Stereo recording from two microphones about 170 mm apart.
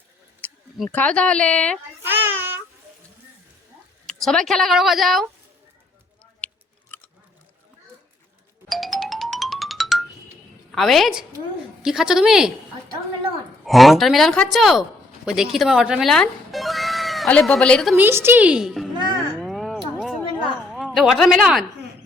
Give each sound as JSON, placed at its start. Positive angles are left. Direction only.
{"t": 0.9, "sound": "a woman's voice", "side_deg": 10}
{"t": 2.0, "sound": "child singing", "side_deg": -10}
{"t": 4.0, "sound": "speech", "side_deg": 5}
{"t": 6.4, "sound": "a sound", "side_deg": 5}
{"t": 8.7, "sound": "music", "side_deg": 0}
{"t": 10.7, "sound": "a woman's voice", "side_deg": 0}
{"t": 13.7, "sound": "speech", "side_deg": 0}
{"t": 17.9, "sound": "a woman's voice", "side_deg": -10}
{"t": 18.9, "sound": "music", "side_deg": -25}
{"t": 19.4, "sound": "a sound", "side_deg": 0}
{"t": 20.7, "sound": "speech", "side_deg": 0}